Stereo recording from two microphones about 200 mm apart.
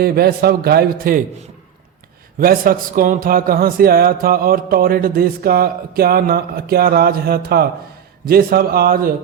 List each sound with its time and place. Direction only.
0.0 s speech: 50° right (ahead or behind)
2.4 s speech: 45° right (ahead or behind)